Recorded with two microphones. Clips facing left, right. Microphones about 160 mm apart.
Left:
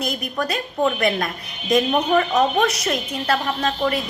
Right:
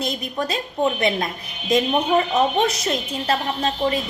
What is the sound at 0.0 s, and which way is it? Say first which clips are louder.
A woman's voice: even; 25° right (ahead or behind).